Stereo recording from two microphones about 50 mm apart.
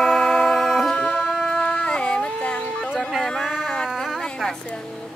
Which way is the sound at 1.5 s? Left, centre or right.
Left.